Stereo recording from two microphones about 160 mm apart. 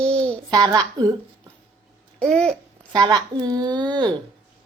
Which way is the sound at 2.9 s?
25° right (ahead or behind).